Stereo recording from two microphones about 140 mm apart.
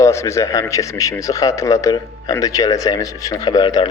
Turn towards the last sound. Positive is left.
turn(degrees=30)  # may be behind; listen again after turning